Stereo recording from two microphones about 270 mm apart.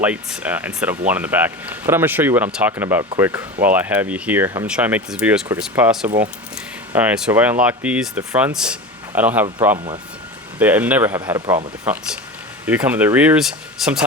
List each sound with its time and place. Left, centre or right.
0.0 s speech: centre
9.7 s speech: centre
10.6 s speech: centre